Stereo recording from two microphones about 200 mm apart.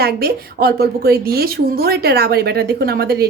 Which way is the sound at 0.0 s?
50° right (ahead or behind).